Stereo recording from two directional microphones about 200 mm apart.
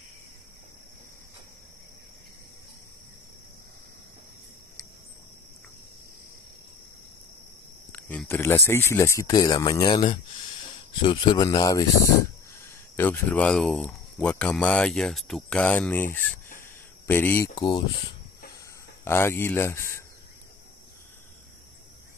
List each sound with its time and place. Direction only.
7.9 s speech: 10° left (ahead or behind)
17.6 s speech: 25° left (ahead or behind)
19.0 s speech: 10° left (ahead or behind)